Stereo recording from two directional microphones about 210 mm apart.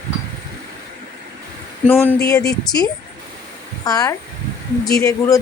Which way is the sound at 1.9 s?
10° left (ahead or behind).